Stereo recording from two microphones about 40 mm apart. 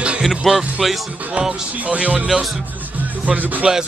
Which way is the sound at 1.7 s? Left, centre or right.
Right.